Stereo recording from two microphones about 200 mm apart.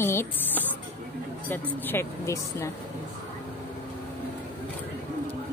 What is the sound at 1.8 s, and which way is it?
Speech, 10° left (ahead or behind).